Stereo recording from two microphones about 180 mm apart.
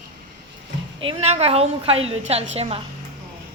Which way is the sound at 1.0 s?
35° right (ahead or behind).